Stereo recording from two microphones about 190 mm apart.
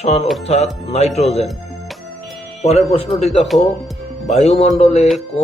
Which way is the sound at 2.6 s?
35° left (ahead or behind).